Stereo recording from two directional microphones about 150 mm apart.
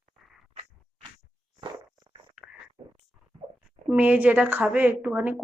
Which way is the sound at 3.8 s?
10° right (ahead or behind).